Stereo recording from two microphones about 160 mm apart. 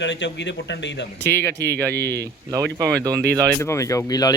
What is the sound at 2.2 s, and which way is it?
Speech, 20° right (ahead or behind).